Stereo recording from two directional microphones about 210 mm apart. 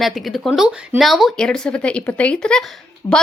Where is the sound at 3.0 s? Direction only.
20° left (ahead or behind).